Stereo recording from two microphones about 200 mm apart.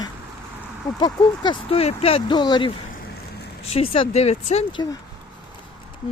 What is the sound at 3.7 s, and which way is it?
Speech, 30° left (ahead or behind).